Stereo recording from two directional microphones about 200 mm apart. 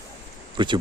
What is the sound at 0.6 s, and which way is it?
Speech, 25° right (ahead or behind).